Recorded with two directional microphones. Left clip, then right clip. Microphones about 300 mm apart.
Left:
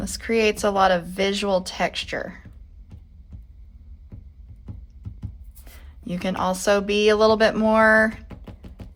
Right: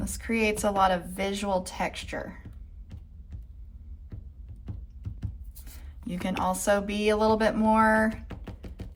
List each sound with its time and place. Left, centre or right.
0.0 s speech: left
5.6 s speech: left